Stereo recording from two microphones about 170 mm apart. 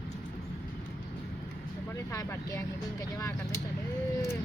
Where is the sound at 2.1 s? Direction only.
20° left (ahead or behind).